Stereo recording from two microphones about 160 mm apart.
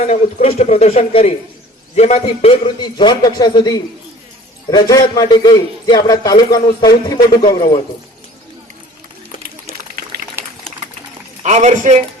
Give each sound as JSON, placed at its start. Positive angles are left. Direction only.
{"t": 0.0, "sound": "a man's voice", "side_deg": 45}
{"t": 11.4, "sound": "a man's voice", "side_deg": -45}